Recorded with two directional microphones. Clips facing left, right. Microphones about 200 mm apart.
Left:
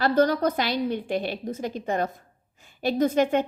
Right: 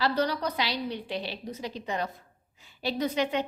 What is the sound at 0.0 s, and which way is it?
A woman's voice, 50° left (ahead or behind).